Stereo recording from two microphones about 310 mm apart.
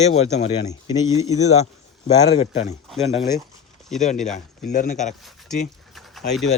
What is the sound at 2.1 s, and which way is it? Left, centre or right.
Speech, centre.